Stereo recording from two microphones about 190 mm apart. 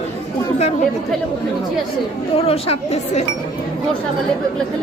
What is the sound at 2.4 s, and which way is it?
Speech, 35° left (ahead or behind).